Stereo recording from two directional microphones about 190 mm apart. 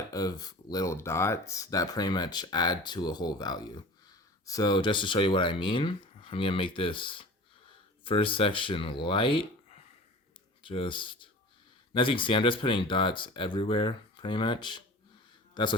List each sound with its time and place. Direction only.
0.1 s speech: 20° left (ahead or behind)